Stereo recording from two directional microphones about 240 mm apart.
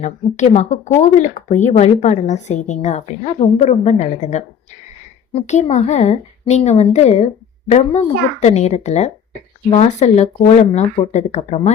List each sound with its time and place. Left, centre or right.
0.0 s speech: left